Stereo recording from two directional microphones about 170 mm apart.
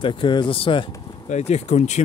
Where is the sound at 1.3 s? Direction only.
40° left (ahead or behind).